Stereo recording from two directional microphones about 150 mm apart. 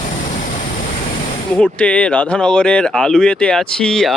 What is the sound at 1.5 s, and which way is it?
Speech, 10° left (ahead or behind).